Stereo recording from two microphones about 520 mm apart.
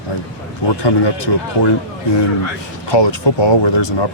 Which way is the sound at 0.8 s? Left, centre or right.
Left.